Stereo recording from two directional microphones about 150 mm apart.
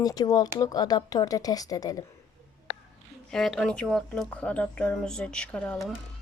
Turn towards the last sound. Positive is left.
turn(degrees=10)  # may be behind; listen again after turning